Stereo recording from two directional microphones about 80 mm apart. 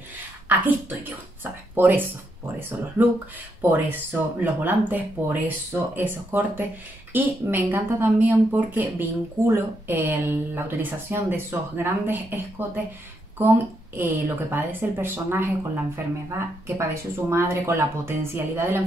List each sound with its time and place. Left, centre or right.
0.5 s speech: right